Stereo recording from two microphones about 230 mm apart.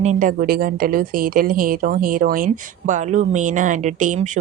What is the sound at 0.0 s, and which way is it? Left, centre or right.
A woman's voice, right.